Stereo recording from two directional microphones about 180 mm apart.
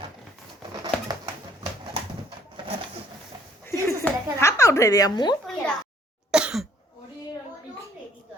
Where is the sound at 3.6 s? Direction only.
15° left (ahead or behind).